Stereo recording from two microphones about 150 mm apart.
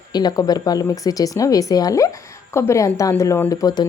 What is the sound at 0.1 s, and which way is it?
A woman's voice, 25° left (ahead or behind).